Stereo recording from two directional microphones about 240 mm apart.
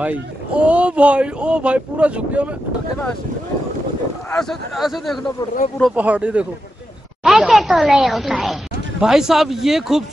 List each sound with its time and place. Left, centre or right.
0.0 s speech: centre
4.3 s speech: centre